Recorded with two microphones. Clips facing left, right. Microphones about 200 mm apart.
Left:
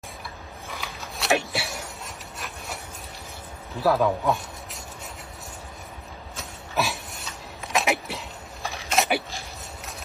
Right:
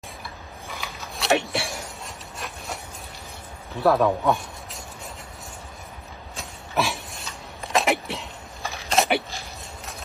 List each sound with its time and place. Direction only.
0.7 s mechanisms: centre (ahead or behind)
3.8 s speech: centre (ahead or behind)
6.3 s a sound: centre (ahead or behind)